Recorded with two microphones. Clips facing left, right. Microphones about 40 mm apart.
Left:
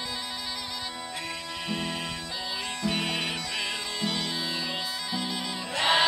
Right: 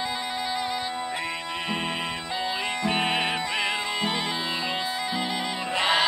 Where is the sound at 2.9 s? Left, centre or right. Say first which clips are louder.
Right 4 dB; right.